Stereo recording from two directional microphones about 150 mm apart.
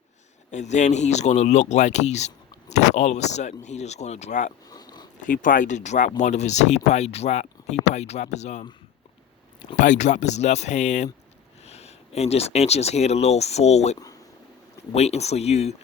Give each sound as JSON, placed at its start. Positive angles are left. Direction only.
{"t": 0.5, "sound": "speech", "side_deg": 50}
{"t": 4.7, "sound": "a sound", "side_deg": 25}
{"t": 5.2, "sound": "speech", "side_deg": 60}
{"t": 9.7, "sound": "speech", "side_deg": 55}